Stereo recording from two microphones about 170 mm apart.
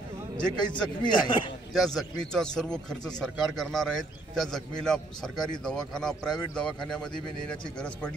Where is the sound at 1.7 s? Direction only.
Centre (ahead or behind).